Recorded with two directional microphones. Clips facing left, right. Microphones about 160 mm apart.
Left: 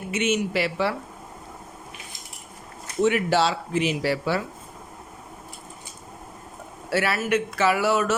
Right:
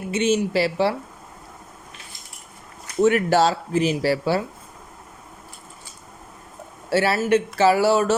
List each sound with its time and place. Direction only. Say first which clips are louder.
0.1 s speech: right 4 dB; 30° right (ahead or behind)
3.0 s speech: right 4 dB; 45° right (ahead or behind)
6.9 s speech: right 4 dB; 30° right (ahead or behind)